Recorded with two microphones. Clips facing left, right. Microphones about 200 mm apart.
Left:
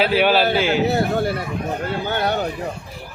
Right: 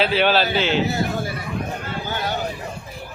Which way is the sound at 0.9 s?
60° left (ahead or behind).